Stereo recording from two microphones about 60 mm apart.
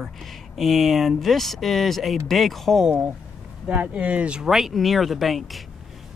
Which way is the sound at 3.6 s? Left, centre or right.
Centre.